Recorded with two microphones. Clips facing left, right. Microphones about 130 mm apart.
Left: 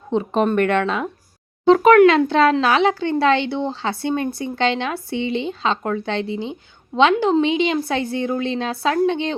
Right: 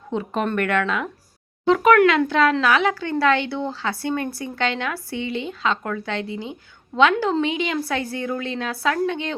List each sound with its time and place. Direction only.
0.1 s speech: 25° left (ahead or behind)